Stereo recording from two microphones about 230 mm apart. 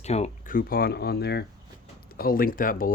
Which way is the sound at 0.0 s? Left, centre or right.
Left.